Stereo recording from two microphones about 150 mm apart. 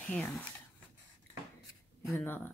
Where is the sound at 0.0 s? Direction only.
10° left (ahead or behind).